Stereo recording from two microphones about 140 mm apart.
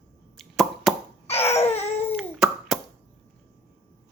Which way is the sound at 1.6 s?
50° left (ahead or behind).